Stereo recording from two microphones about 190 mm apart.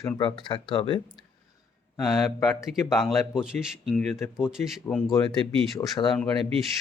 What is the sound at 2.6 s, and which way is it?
Speech, centre (ahead or behind).